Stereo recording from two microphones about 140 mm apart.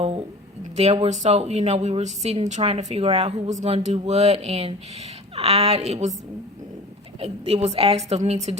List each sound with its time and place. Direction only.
0.0 s a sound: 45° right (ahead or behind)
0.8 s speech: 50° right (ahead or behind)
7.2 s speech: 45° right (ahead or behind)